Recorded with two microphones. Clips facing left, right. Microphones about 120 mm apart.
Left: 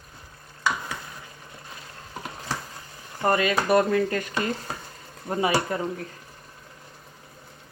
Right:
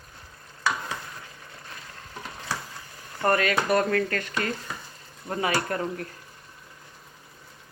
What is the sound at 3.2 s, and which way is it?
Speech, 15° left (ahead or behind).